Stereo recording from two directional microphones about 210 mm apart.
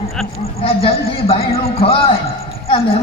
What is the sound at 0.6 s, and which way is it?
A man's voice, 25° left (ahead or behind).